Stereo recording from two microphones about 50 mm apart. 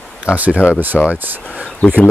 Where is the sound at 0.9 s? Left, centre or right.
Centre.